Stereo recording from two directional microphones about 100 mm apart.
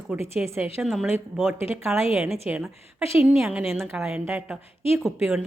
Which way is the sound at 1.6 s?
25° right (ahead or behind).